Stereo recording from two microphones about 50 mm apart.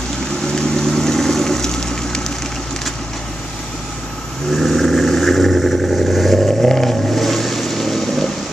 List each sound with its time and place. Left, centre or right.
0.6 s vehicle: centre
4.5 s vehicle: centre